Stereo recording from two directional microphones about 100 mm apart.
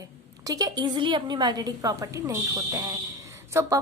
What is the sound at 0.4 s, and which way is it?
A woman's voice, 40° right (ahead or behind).